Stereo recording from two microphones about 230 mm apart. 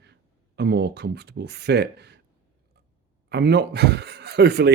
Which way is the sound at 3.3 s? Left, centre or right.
Right.